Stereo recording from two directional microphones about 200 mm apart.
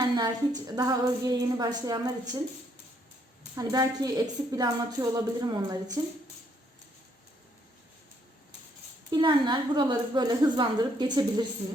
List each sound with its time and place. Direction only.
0.0 s a woman's voice: 20° right (ahead or behind)
3.5 s a woman's voice: 20° right (ahead or behind)
9.1 s a woman's voice: 25° right (ahead or behind)